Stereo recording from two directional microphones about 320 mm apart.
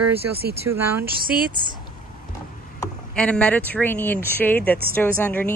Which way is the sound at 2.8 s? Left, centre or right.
Centre.